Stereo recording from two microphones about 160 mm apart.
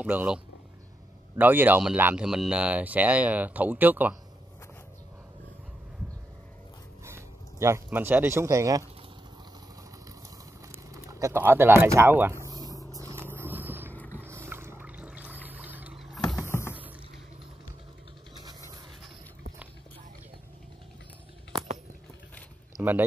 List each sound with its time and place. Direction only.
0.0 s speech: 10° right (ahead or behind)
1.4 s speech: 10° right (ahead or behind)
7.1 s speech: 15° right (ahead or behind)
10.7 s bird: 20° right (ahead or behind)
13.9 s music: 10° left (ahead or behind)
14.2 s a sound: 15° right (ahead or behind)
15.4 s vehicle: 10° right (ahead or behind)
22.8 s speech: 10° right (ahead or behind)